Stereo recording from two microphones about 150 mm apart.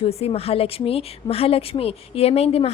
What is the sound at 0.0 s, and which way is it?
A woman's voice, 40° left (ahead or behind).